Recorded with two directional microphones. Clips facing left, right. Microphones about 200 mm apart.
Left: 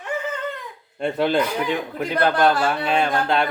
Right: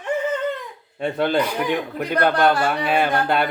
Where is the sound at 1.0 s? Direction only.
Centre (ahead or behind).